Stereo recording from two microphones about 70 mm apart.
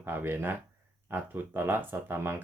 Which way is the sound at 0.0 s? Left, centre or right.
Right.